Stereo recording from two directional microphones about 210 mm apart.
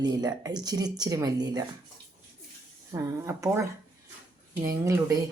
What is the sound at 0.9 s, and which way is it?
Speech, 15° right (ahead or behind).